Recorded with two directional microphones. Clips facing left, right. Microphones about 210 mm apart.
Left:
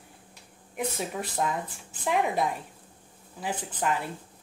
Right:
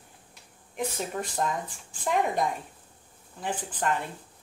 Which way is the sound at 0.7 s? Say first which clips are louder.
Even; 5° left (ahead or behind).